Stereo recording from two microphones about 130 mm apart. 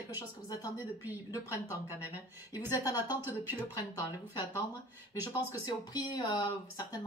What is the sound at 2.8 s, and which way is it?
A woman's voice, 30° left (ahead or behind).